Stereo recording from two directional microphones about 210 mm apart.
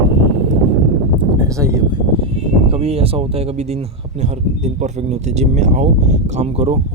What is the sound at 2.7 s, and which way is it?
Speech, 30° right (ahead or behind).